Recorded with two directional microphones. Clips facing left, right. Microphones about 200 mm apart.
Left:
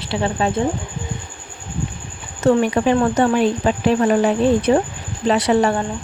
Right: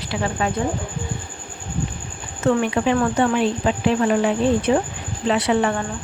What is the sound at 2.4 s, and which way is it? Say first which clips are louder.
Speech: left 3 dB; 40° left (ahead or behind).